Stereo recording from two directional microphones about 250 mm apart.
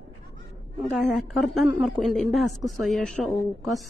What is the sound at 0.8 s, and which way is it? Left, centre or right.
A woman's voice, centre.